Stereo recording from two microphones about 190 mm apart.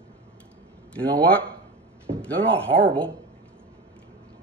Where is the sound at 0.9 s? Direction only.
5° left (ahead or behind).